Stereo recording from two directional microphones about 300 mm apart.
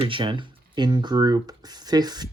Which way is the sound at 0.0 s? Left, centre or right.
Centre.